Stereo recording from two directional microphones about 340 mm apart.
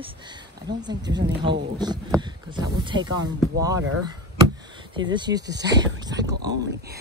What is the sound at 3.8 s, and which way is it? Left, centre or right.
Speech, right.